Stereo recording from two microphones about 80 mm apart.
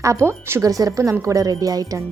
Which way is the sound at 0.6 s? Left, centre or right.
Right.